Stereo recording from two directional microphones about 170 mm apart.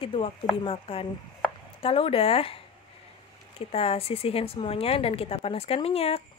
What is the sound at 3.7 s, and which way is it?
Speech, 35° left (ahead or behind).